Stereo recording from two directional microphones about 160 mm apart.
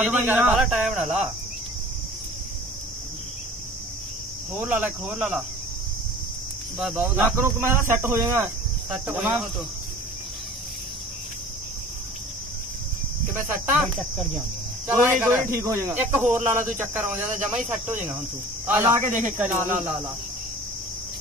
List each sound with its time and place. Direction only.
0.0 s speech: 10° right (ahead or behind)
4.6 s speech: 10° right (ahead or behind)
6.8 s cricket: 5° right (ahead or behind)
7.2 s speech: 15° right (ahead or behind)
13.3 s speech: 15° right (ahead or behind)
13.9 s cricket: centre (ahead or behind)
14.9 s speech: 10° right (ahead or behind)